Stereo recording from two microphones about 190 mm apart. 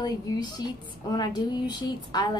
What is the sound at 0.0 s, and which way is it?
Speech, 20° left (ahead or behind).